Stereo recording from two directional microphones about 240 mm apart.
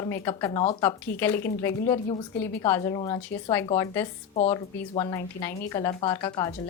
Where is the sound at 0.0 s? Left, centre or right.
Centre.